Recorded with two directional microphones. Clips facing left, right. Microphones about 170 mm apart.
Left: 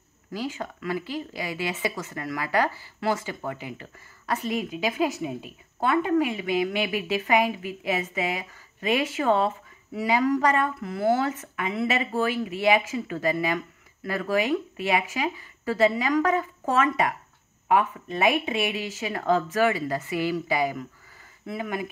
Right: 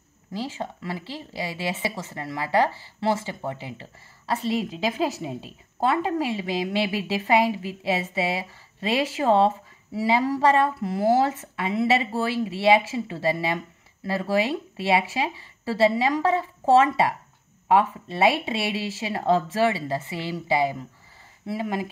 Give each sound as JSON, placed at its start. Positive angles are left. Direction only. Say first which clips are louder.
{"t": 0.3, "sound": "speech", "louder": "right 1 dB", "side_deg": -25}